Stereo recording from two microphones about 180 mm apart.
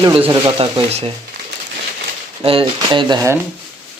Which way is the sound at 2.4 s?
30° right (ahead or behind).